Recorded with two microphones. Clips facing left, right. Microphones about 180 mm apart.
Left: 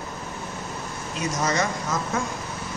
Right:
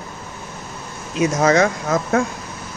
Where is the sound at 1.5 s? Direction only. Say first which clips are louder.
Right 8 dB; 55° right (ahead or behind).